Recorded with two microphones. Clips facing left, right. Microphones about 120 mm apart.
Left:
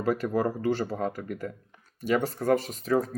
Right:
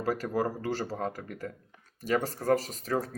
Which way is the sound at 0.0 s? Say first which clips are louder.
Left 3 dB; 40° right (ahead or behind).